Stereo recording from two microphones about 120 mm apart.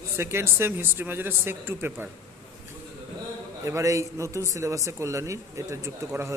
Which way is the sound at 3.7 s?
25° right (ahead or behind).